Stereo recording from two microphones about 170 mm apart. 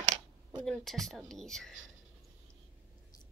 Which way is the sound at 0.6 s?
Centre (ahead or behind).